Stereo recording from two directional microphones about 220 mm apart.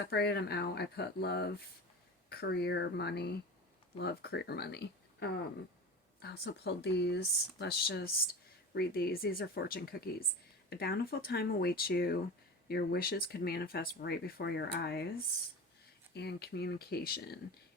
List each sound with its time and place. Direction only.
0.0 s speech: 45° left (ahead or behind)
16.1 s speech: 50° left (ahead or behind)